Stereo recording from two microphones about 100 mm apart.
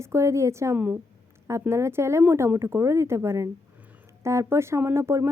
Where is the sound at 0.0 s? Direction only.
30° right (ahead or behind).